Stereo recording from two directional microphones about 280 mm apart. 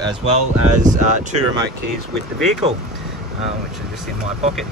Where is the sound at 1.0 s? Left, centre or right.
Right.